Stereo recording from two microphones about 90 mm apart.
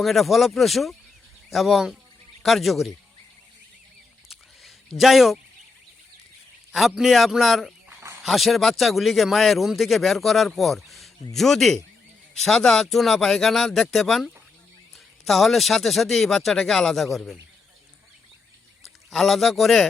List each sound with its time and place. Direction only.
0.0 s speech: centre (ahead or behind)
4.3 s a sound: centre (ahead or behind)
6.7 s speech: centre (ahead or behind)
18.8 s speech: centre (ahead or behind)